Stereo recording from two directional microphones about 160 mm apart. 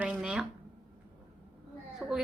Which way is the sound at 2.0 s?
5° right (ahead or behind).